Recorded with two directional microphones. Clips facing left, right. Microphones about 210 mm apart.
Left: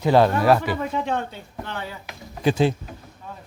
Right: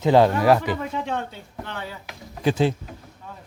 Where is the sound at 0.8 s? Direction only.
50° left (ahead or behind).